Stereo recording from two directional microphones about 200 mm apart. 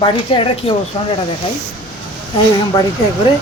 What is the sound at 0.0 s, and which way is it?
Speech, 25° left (ahead or behind).